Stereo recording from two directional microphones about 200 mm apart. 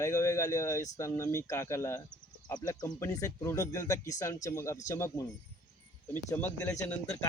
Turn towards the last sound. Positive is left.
turn(degrees=15)  # may be behind; listen again after turning